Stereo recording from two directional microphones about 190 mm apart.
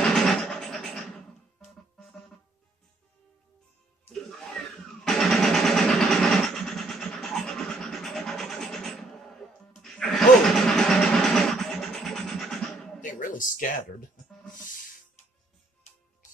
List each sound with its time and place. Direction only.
0.0 s music: centre (ahead or behind)
4.1 s music: centre (ahead or behind)
13.0 s a sound: 45° left (ahead or behind)